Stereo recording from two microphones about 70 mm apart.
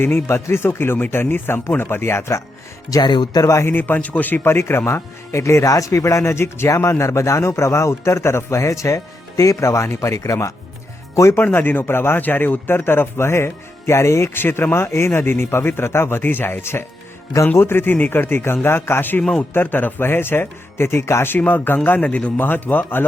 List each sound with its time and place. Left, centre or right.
0.0 s speech: left
2.9 s speech: left
3.4 s a man's voice: left
3.8 s speech: left
4.4 s a man's voice: left
11.3 s speech: left
19.2 s speech: centre
19.5 s speech: left